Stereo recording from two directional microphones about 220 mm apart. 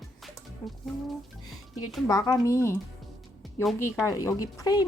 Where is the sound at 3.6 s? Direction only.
Centre (ahead or behind).